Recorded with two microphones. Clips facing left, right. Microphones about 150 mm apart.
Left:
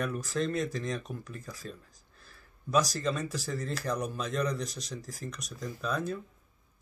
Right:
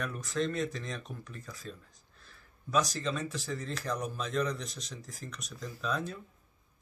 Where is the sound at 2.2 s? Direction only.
40° left (ahead or behind).